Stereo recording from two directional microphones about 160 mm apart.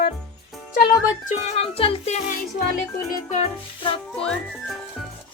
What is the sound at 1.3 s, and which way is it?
Speech, 45° left (ahead or behind).